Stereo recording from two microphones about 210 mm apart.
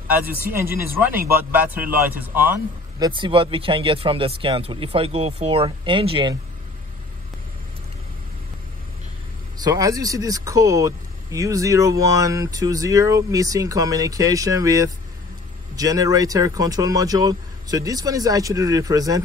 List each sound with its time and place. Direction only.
0.6 s speech: 10° right (ahead or behind)
3.0 s speech: 25° right (ahead or behind)
9.6 s speech: 20° right (ahead or behind)